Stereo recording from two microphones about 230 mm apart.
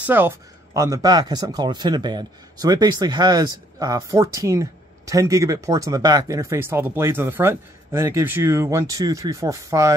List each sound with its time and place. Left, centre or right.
0.0 s speech: centre